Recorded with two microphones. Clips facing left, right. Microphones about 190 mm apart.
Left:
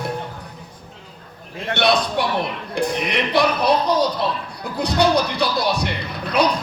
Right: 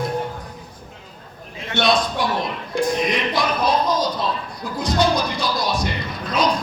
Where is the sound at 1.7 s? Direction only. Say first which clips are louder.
Left 1 dB; 65° left (ahead or behind).